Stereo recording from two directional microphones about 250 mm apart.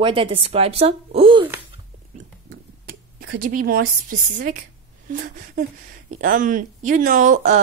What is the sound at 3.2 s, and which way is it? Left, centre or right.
Speech, right.